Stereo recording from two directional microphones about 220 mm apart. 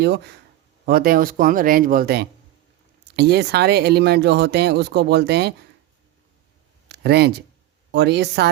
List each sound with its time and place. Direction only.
0.9 s speech: 40° right (ahead or behind)
6.8 s a sound: 50° right (ahead or behind)
7.9 s speech: 50° right (ahead or behind)